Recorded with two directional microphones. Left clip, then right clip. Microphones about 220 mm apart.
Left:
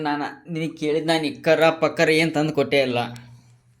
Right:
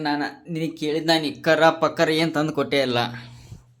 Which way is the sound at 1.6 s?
Centre (ahead or behind).